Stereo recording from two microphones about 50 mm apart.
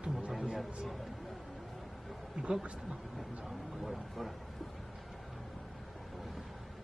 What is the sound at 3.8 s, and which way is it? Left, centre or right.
Speech, centre.